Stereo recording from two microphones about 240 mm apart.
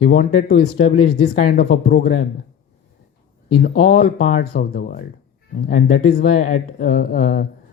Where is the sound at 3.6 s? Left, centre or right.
Left.